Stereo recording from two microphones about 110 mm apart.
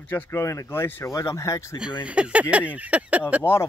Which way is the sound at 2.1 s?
10° right (ahead or behind).